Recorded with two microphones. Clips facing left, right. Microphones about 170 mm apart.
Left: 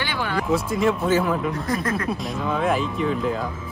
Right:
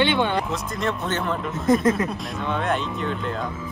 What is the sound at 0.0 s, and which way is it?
Speech, 25° right (ahead or behind).